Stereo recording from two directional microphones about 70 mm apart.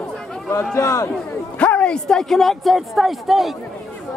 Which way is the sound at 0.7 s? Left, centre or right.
Left.